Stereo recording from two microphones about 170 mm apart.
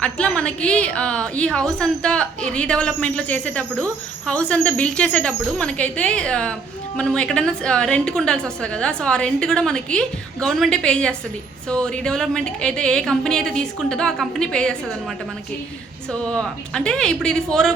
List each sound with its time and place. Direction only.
0.0 s a woman's voice: 5° left (ahead or behind)
16.1 s speech: 5° left (ahead or behind)